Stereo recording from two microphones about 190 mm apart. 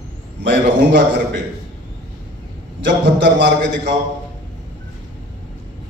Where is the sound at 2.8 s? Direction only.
65° right (ahead or behind).